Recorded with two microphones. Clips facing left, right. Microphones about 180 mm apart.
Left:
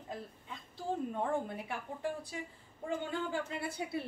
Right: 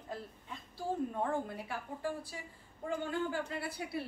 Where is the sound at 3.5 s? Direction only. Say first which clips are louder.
Left 1 dB; 25° left (ahead or behind).